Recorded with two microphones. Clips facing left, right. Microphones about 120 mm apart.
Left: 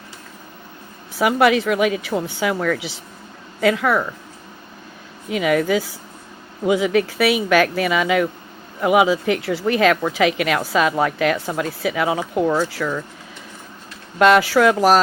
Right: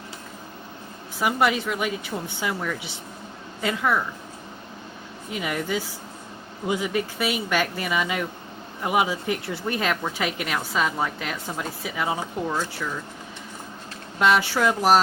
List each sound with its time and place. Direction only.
1.2 s speech: 85° left
5.3 s speech: 90° left; by 13.0 s 75° left (ahead or behind)
14.2 s speech: 90° left